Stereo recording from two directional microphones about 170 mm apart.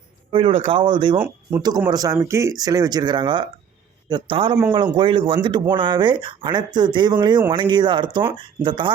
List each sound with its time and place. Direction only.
0.3 s speech: 30° right (ahead or behind)
1.2 s speech: 10° right (ahead or behind)
1.9 s speech: 20° right (ahead or behind)